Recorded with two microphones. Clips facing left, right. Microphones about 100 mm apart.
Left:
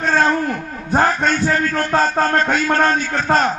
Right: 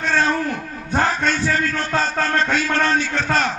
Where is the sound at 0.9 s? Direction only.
40° left (ahead or behind).